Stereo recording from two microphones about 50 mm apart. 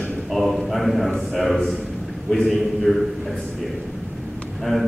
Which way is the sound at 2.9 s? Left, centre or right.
Centre.